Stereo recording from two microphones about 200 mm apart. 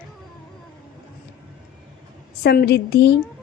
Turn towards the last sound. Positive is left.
turn(degrees=55)  # may be behind; listen again after turning